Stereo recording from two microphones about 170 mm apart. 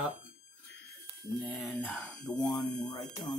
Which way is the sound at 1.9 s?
5° left (ahead or behind).